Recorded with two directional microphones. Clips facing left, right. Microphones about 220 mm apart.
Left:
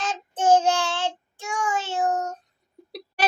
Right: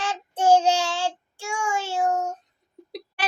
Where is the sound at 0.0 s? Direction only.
10° right (ahead or behind).